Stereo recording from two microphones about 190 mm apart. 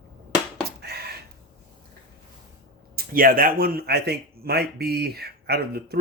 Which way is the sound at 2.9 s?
50° right (ahead or behind).